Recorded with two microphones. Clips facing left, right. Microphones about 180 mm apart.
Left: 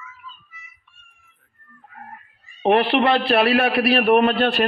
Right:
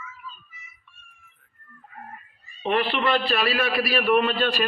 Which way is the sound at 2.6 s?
70° left (ahead or behind).